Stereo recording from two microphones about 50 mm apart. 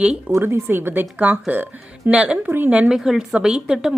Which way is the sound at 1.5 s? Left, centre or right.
Right.